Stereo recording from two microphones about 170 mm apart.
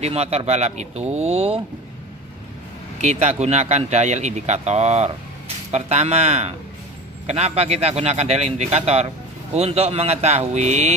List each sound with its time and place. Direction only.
0.0 s speech: 40° right (ahead or behind)
3.0 s speech: 40° right (ahead or behind)